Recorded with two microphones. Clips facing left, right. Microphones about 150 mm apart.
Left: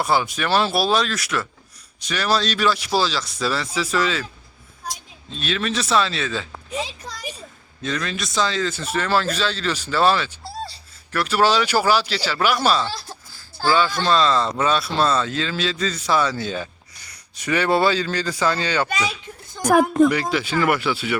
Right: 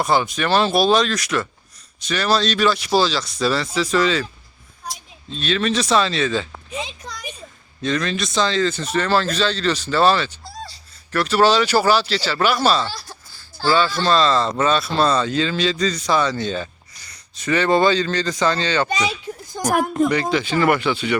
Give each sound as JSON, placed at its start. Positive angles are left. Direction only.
{"t": 0.0, "sound": "speech", "side_deg": 10}
{"t": 5.4, "sound": "speech", "side_deg": 5}
{"t": 7.8, "sound": "speech", "side_deg": 5}
{"t": 13.7, "sound": "speech", "side_deg": 10}
{"t": 19.6, "sound": "a sound", "side_deg": -45}
{"t": 20.1, "sound": "speech", "side_deg": 5}